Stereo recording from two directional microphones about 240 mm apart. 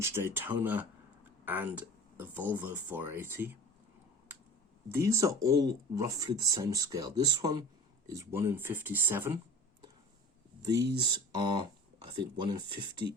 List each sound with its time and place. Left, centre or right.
0.0 s speech: centre
4.9 s speech: centre
10.6 s speech: centre